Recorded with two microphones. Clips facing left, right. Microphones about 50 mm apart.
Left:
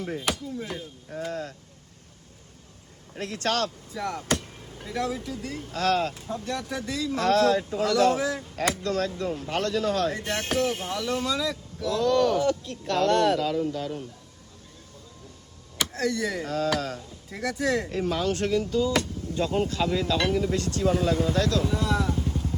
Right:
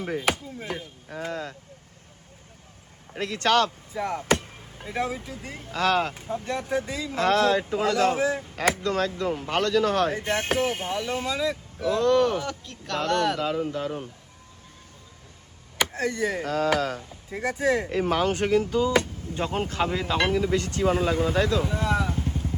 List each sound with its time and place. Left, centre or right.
0.0 s speech: right
3.1 s speech: right
3.9 s speech: right
5.7 s speech: right
6.1 s speech: right
7.2 s speech: right
8.2 s speech: right
10.2 s speech: right
15.9 s speech: right
16.4 s speech: right
17.2 s speech: centre
18.3 s speech: right
18.7 s speech: right
21.2 s speech: right